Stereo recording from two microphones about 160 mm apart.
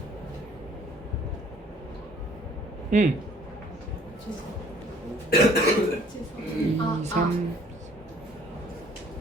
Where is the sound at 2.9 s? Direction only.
50° right (ahead or behind).